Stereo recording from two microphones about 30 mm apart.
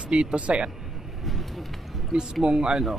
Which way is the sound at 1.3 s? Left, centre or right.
Centre.